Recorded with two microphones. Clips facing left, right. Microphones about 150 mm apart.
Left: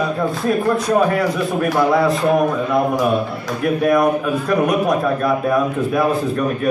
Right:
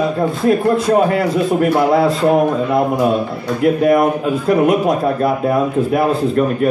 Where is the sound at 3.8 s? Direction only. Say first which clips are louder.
Left 1 dB; 25° right (ahead or behind).